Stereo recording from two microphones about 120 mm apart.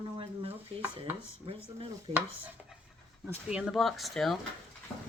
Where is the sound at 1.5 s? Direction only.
50° right (ahead or behind).